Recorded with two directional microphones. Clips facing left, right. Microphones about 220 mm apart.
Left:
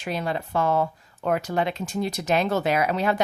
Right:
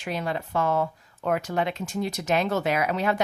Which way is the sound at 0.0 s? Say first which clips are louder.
Left 2 dB; 35° left (ahead or behind).